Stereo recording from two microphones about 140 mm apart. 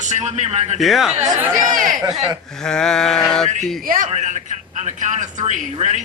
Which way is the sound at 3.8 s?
75° right (ahead or behind).